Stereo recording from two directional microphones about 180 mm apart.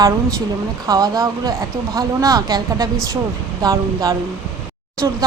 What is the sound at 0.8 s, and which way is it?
A woman's voice, 20° right (ahead or behind).